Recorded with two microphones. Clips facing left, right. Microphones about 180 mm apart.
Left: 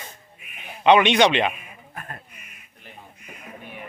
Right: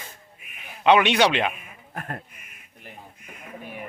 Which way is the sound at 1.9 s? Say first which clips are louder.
Right 5 dB; 60° right (ahead or behind).